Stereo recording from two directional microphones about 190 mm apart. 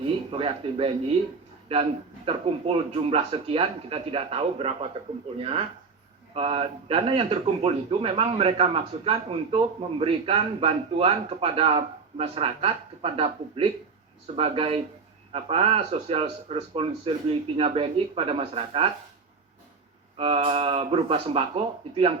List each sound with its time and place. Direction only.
0.3 s speech: 30° right (ahead or behind)
20.1 s speech: 30° right (ahead or behind)